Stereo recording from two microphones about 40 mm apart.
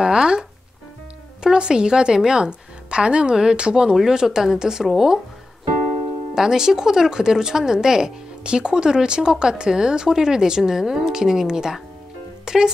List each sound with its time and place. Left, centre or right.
0.0 s music: centre
1.4 s a woman's voice: right
3.9 s speech: centre
6.3 s speech: centre